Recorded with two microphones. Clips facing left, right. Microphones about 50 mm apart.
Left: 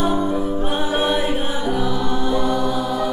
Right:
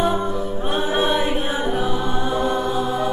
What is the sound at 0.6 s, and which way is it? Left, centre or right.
Music, centre.